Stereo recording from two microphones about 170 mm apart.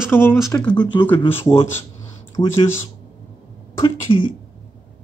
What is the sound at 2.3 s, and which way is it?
Speech, 30° left (ahead or behind).